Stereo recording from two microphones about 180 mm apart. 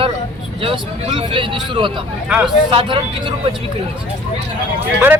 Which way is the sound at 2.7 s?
30° right (ahead or behind).